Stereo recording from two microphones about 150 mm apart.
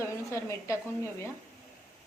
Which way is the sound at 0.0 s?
20° left (ahead or behind).